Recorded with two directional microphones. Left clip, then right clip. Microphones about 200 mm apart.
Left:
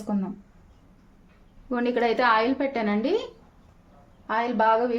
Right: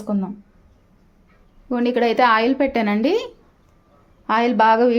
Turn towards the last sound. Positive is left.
turn(degrees=-45)  # may be behind; listen again after turning